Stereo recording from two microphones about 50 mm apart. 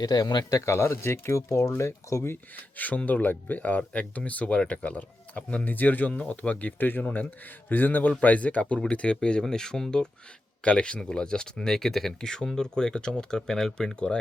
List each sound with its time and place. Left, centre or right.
0.6 s speech: left
1.8 s speech: left
2.7 s speech: left; by 14.2 s centre